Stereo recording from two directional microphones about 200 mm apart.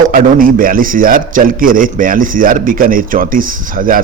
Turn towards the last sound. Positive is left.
turn(degrees=-45)  # may be behind; listen again after turning